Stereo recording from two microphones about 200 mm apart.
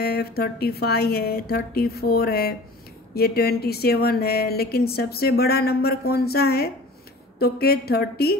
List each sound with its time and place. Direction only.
0.0 s speech: 50° left (ahead or behind)